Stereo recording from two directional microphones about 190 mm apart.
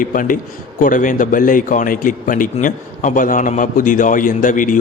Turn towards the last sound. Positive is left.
turn(degrees=45)  # may be behind; listen again after turning